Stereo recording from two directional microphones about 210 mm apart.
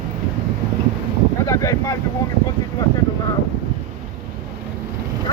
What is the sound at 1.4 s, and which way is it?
Speech, 15° left (ahead or behind).